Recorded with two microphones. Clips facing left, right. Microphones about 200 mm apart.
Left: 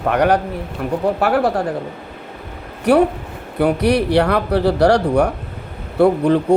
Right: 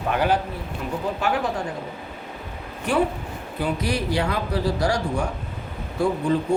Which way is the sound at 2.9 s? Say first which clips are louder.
Left 9 dB; 65° left (ahead or behind).